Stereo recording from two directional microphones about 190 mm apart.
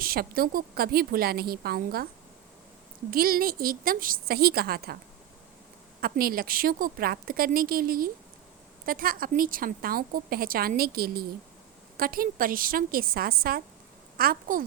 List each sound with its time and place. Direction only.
0.0 s a woman's voice: 50° right (ahead or behind)
3.1 s a woman's voice: 50° right (ahead or behind)
6.0 s a woman's voice: 50° right (ahead or behind)